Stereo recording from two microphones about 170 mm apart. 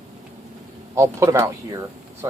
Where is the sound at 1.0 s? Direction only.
15° right (ahead or behind).